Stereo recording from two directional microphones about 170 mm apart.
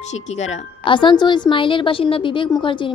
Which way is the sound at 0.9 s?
25° left (ahead or behind).